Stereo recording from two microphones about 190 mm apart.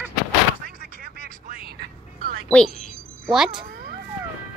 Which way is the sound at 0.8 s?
50° right (ahead or behind).